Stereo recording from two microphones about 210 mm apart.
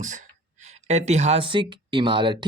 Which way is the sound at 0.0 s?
35° right (ahead or behind).